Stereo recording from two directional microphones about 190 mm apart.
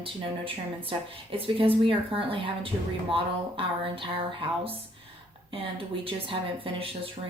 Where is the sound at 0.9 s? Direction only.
30° right (ahead or behind).